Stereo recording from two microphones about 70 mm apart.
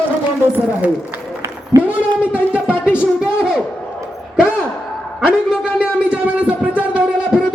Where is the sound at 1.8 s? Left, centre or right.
Right.